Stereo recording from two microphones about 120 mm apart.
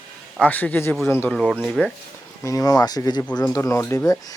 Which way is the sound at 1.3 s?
Centre (ahead or behind).